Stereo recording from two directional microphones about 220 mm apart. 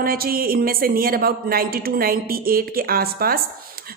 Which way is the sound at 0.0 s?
40° right (ahead or behind).